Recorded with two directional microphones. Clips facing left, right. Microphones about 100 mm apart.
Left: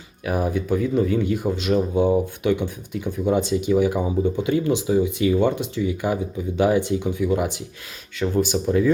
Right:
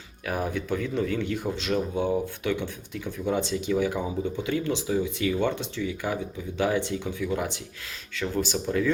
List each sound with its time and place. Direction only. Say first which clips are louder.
0.3 s speech: left 6 dB; 10° left (ahead or behind)